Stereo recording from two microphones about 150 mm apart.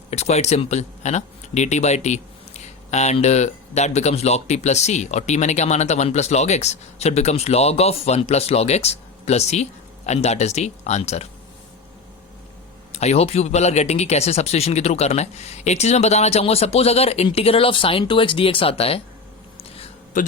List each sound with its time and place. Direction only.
0.1 s speech: 45° left (ahead or behind)
12.9 s speech: 45° left (ahead or behind)